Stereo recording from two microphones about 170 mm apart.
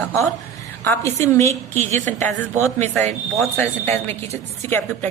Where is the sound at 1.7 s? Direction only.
45° right (ahead or behind).